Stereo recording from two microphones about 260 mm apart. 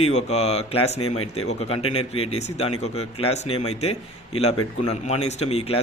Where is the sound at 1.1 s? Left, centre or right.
Left.